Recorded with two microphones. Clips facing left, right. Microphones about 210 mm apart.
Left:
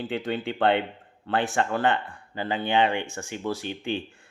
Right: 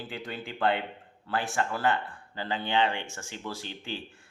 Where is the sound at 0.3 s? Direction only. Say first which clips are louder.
Left 5 dB; 70° left (ahead or behind).